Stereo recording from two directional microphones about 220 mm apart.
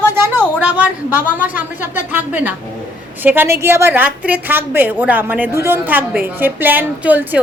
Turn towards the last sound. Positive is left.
turn(degrees=-10)  # may be behind; listen again after turning